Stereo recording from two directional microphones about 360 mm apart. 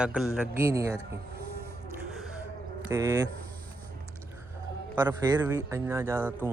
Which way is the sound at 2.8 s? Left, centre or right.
Centre.